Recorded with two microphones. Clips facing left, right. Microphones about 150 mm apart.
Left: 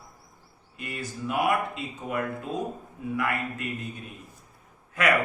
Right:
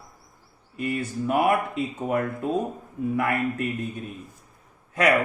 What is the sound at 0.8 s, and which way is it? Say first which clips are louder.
Speech: right 8 dB; 50° right (ahead or behind).